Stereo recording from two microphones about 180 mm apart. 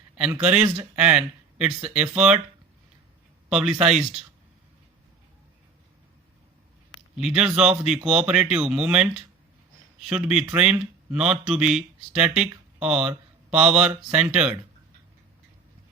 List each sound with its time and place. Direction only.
0.2 s speech: 5° right (ahead or behind)
3.5 s speech: 5° right (ahead or behind)
7.2 s speech: 5° right (ahead or behind)